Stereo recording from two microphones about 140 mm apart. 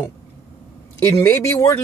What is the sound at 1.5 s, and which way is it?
Speech, 20° left (ahead or behind).